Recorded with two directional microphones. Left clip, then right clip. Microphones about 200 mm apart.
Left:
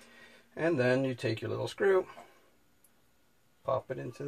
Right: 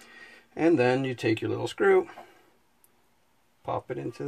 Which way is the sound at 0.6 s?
50° right (ahead or behind).